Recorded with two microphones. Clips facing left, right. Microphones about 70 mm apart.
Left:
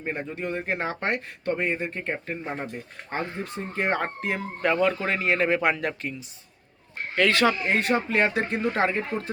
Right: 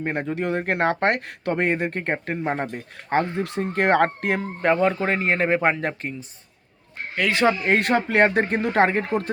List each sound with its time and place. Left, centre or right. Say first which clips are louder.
0.0 s speech: right 6 dB; right
4.6 s a man's voice: right 3 dB; right
7.2 s speech: left 1 dB; centre
7.6 s speech: right 4 dB; right